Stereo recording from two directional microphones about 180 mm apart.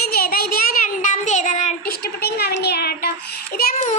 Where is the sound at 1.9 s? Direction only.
60° left (ahead or behind).